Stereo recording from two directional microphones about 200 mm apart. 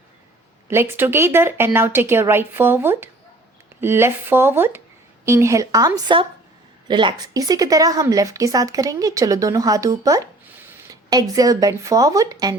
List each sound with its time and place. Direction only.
0.7 s a woman's voice: 10° right (ahead or behind)